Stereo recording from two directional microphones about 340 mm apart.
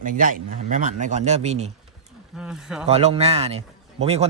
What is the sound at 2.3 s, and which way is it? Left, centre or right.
Speech, centre.